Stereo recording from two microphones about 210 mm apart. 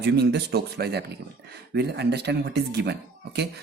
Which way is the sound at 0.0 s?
50° right (ahead or behind).